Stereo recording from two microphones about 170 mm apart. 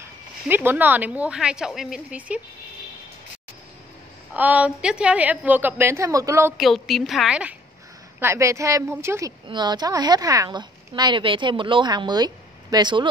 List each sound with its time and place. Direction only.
0.0 s speech: 10° right (ahead or behind)
4.3 s speech: 10° right (ahead or behind)
6.5 s a woman's voice: centre (ahead or behind)
8.2 s a woman's voice: 15° right (ahead or behind)